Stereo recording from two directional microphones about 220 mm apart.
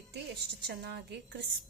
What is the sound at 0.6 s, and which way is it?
Speech, 50° right (ahead or behind).